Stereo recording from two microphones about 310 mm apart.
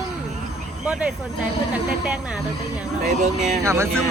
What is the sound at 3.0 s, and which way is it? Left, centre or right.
Speech, right.